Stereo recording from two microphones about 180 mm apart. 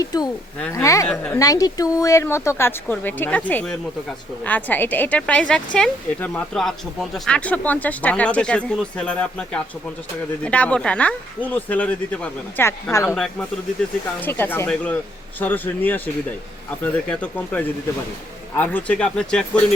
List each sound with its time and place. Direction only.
0.0 s speech: 20° left (ahead or behind)
1.4 s speech: 20° left (ahead or behind)
14.2 s speech: 10° left (ahead or behind)